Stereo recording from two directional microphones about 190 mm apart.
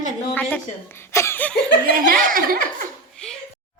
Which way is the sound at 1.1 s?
15° left (ahead or behind).